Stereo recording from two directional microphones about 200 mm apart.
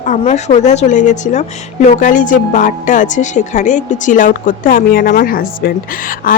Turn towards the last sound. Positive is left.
turn(degrees=45)  # may be behind; listen again after turning